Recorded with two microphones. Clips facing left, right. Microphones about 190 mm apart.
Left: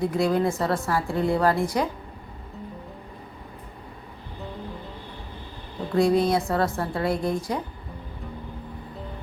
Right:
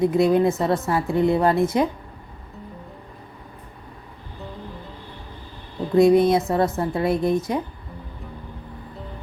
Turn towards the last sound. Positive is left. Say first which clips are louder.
# right 4 dB
turn(degrees=-20)  # may be behind; listen again after turning